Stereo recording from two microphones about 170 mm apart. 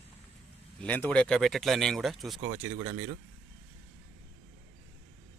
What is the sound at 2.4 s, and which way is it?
Speech, 35° right (ahead or behind).